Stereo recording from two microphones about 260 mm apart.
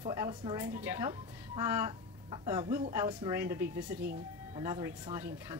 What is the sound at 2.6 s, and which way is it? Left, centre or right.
Speech, centre.